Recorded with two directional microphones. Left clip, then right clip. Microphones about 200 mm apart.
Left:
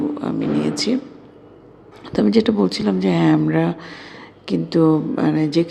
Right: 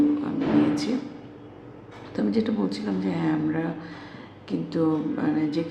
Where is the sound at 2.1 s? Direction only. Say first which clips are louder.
Left 9 dB; 40° left (ahead or behind).